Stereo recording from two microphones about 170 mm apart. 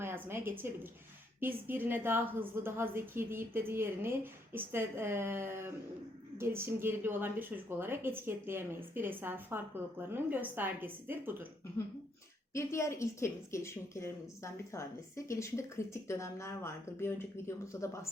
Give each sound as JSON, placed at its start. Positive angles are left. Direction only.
{"t": 0.0, "sound": "a woman's voice", "side_deg": -15}
{"t": 12.5, "sound": "speech", "side_deg": 15}